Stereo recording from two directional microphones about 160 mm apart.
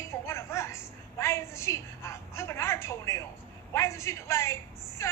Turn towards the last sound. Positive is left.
turn(degrees=20)  # may be behind; listen again after turning